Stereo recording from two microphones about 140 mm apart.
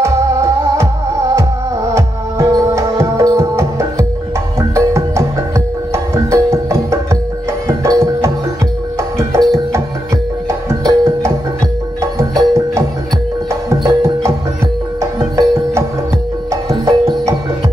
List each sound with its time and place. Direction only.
0.0 s music: 20° right (ahead or behind)
9.3 s music: 25° right (ahead or behind)